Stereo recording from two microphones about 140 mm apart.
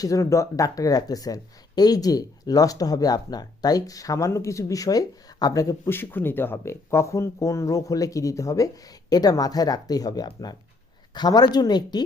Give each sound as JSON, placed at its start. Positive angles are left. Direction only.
{"t": 0.0, "sound": "speech", "side_deg": 25}